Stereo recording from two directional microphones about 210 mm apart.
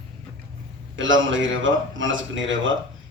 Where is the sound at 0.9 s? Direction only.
65° right (ahead or behind).